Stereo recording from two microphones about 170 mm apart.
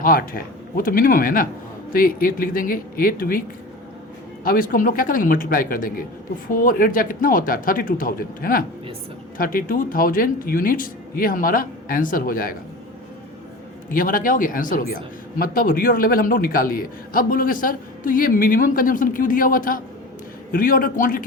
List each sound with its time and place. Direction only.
0.0 s a man's voice: 55° left (ahead or behind)
4.4 s a man's voice: 55° left (ahead or behind)
13.9 s a man's voice: 55° left (ahead or behind)